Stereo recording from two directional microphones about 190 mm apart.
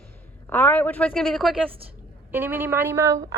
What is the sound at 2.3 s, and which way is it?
Speech, 10° right (ahead or behind).